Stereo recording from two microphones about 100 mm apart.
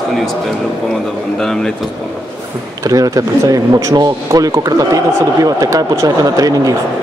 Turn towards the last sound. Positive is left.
turn(degrees=-35)  # may be behind; listen again after turning